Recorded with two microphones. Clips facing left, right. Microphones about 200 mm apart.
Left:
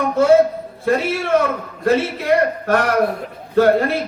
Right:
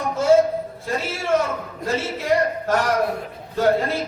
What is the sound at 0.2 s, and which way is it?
A man's voice, 65° left (ahead or behind).